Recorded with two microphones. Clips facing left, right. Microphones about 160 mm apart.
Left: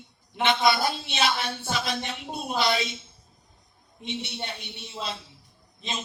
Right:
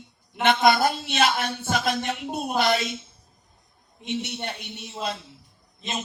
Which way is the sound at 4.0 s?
50° right (ahead or behind).